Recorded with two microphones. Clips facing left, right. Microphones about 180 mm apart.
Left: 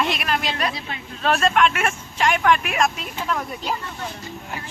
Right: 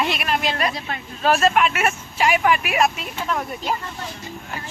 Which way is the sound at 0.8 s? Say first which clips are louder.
Right 3 dB; 50° right (ahead or behind).